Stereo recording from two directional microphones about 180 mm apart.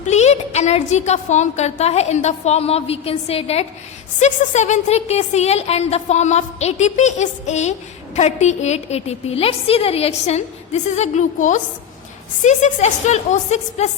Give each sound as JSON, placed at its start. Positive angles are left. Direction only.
{"t": 0.1, "sound": "a woman's voice", "side_deg": 40}